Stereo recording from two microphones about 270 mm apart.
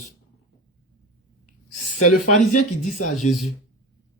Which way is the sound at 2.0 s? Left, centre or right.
Left.